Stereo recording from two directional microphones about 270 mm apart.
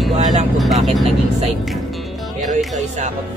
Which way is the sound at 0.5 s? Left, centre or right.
Centre.